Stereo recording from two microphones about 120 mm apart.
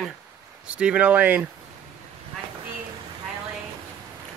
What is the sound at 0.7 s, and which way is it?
Speech, 10° right (ahead or behind).